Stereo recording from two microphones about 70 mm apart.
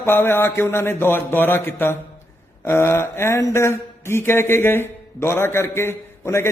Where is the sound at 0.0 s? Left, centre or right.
Left.